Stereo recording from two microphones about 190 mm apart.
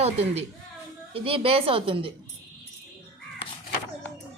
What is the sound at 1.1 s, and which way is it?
A woman's voice, 30° right (ahead or behind).